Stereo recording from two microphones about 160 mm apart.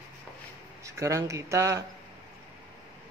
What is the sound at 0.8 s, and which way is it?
Speech, 20° right (ahead or behind).